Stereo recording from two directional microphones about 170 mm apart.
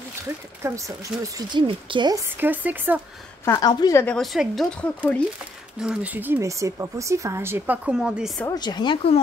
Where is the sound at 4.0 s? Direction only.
5° left (ahead or behind).